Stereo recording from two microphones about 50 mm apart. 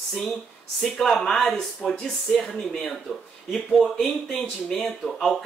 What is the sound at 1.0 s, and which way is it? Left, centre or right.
Speech, centre.